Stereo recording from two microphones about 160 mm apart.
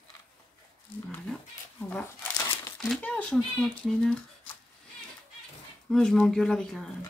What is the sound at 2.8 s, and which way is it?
Speech, 5° left (ahead or behind).